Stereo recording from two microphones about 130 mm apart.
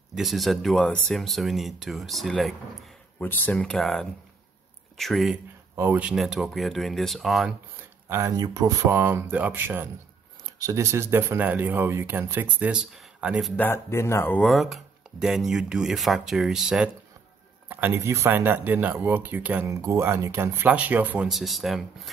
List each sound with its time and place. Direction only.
0.1 s speech: centre (ahead or behind)
3.2 s speech: 15° left (ahead or behind)
5.8 s speech: 15° right (ahead or behind)
8.1 s speech: 20° right (ahead or behind)
8.8 s speech: 15° right (ahead or behind)
13.6 s speech: 20° left (ahead or behind)
14.4 s speech: centre (ahead or behind)
17.6 s speech: 15° right (ahead or behind)
19.7 s speech: 25° right (ahead or behind)
21.3 s speech: centre (ahead or behind)